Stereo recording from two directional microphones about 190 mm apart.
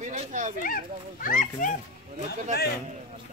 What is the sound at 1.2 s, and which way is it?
Speech, 45° left (ahead or behind).